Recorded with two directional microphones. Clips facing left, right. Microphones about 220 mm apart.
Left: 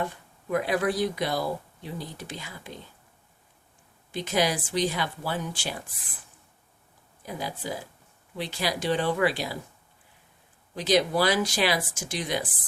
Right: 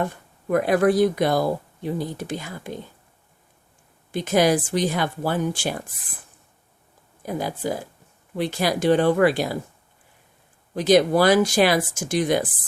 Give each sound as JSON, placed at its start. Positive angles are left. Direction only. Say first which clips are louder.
{"t": 0.0, "sound": "speech", "louder": "right 5 dB", "side_deg": -50}
{"t": 4.1, "sound": "speech", "louder": "right 7 dB", "side_deg": -50}
{"t": 7.2, "sound": "speech", "louder": "right 7 dB", "side_deg": -50}
{"t": 10.8, "sound": "speech", "louder": "right 7 dB", "side_deg": -50}